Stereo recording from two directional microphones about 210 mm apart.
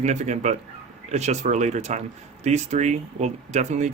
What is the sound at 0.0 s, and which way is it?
Speech, 35° right (ahead or behind).